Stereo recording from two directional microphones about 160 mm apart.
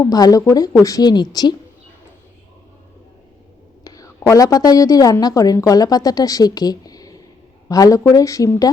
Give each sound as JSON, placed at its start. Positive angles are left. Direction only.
{"t": 0.0, "sound": "a woman's voice", "side_deg": 25}
{"t": 3.8, "sound": "a woman's voice", "side_deg": 20}